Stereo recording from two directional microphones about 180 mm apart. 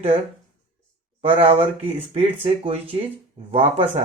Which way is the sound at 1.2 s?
30° right (ahead or behind).